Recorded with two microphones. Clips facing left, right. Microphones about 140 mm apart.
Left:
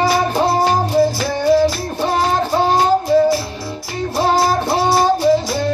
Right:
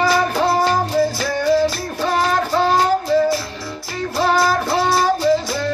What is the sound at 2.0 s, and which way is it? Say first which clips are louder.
Child singing: left 1 dB; 25° left (ahead or behind).